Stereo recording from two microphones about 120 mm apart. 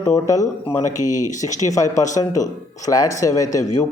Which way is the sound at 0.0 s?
25° left (ahead or behind).